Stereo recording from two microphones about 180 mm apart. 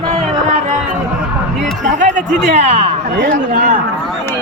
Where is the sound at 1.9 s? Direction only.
45° right (ahead or behind).